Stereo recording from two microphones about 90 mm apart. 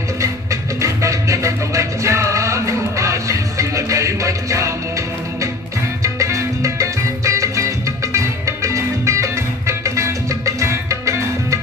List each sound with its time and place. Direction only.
0.8 s music: 35° right (ahead or behind)
6.0 s music: 35° right (ahead or behind)